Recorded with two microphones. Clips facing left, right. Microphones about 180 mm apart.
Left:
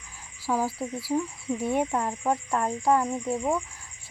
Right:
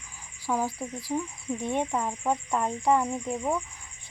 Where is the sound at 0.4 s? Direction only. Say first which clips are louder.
Left 2 dB; 10° left (ahead or behind).